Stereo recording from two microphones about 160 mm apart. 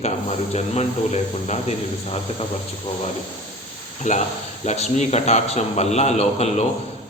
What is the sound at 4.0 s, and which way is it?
Speech, 45° left (ahead or behind).